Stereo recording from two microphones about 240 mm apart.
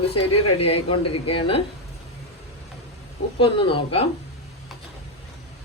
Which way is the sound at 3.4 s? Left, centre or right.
Left.